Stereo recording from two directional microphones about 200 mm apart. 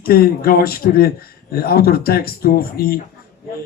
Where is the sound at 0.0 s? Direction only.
50° left (ahead or behind).